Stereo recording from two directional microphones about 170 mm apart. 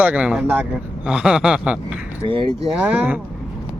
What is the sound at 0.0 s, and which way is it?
Speech, 10° right (ahead or behind).